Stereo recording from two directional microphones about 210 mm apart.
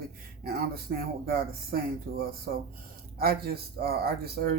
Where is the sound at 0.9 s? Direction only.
45° right (ahead or behind).